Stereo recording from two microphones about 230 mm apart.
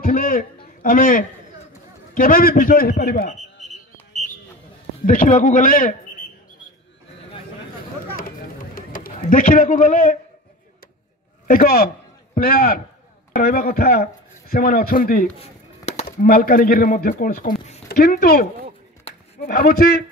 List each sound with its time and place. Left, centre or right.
0.0 s a sound: left
0.8 s a man's voice: left
5.0 s a man's voice: left
8.7 s bird: left
11.4 s a man's voice: left